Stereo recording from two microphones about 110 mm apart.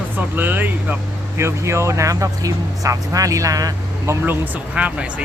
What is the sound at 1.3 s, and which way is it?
Speech, 25° right (ahead or behind).